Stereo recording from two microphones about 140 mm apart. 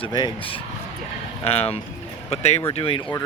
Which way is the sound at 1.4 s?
50° left (ahead or behind).